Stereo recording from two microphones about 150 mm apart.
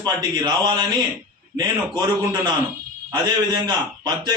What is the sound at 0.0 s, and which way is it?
A man's voice, 30° right (ahead or behind).